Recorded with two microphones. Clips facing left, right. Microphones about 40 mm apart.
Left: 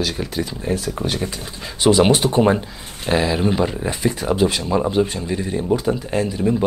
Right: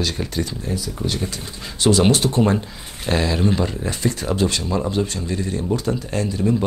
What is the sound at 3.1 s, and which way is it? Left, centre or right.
Speech, centre.